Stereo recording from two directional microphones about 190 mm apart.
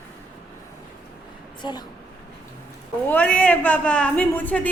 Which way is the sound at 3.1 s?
10° left (ahead or behind).